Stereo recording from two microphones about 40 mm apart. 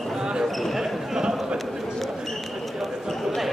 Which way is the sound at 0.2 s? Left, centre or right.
Centre.